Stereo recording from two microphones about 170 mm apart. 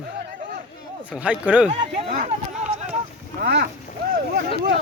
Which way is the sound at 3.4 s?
75° right (ahead or behind).